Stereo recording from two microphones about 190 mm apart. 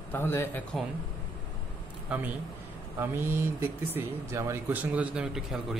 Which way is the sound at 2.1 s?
5° right (ahead or behind).